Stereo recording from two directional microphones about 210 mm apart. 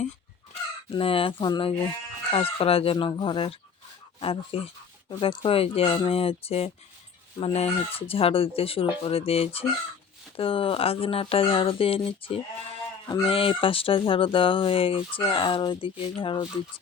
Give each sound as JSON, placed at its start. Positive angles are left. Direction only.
{"t": 0.9, "sound": "speech", "side_deg": 25}